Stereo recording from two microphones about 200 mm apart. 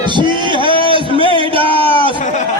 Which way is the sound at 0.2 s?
25° right (ahead or behind).